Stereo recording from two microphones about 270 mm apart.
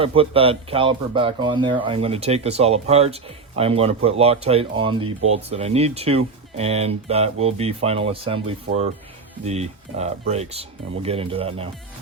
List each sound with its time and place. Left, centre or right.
0.0 s speech: centre